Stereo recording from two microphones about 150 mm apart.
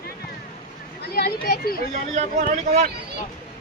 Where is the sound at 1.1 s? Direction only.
90° left.